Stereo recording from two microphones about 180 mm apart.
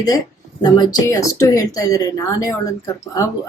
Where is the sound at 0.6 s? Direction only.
20° left (ahead or behind).